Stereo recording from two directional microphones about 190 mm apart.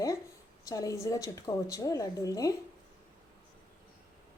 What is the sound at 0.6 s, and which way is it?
A woman's voice, 20° left (ahead or behind).